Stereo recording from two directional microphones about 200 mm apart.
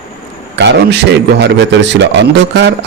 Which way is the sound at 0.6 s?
60° right (ahead or behind).